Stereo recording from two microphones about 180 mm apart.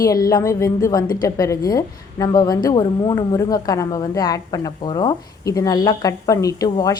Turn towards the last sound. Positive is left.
turn(degrees=20)  # may be behind; listen again after turning